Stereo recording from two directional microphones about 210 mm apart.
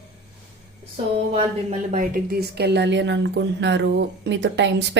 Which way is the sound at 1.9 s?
40° right (ahead or behind).